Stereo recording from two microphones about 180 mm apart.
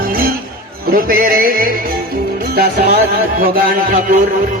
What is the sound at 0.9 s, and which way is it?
Music, 50° right (ahead or behind).